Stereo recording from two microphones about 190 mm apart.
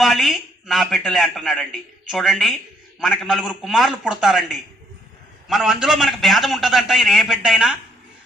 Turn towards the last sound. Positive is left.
turn(degrees=-5)  # may be behind; listen again after turning